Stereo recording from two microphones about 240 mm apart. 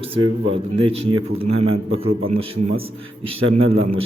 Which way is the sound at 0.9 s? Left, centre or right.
Right.